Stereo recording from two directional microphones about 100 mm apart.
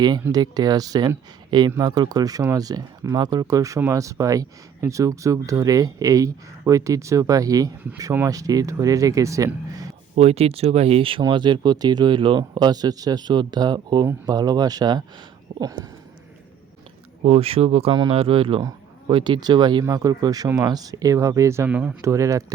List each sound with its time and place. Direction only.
0.3 s speech: 40° right (ahead or behind)
10.2 s speech: 90° right; by 11.2 s 75° right (ahead or behind)
11.2 s speech: 50° right (ahead or behind)
17.2 s speech: 75° right (ahead or behind)
18.1 s speech: 65° right (ahead or behind); by 19.8 s 45° right (ahead or behind)
19.9 s speech: 35° right (ahead or behind)
21.7 s speech: 10° right (ahead or behind)
22.0 s speech: 30° right (ahead or behind)